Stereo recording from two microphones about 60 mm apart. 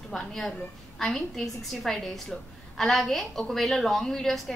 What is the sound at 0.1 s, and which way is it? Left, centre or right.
A woman's voice, centre.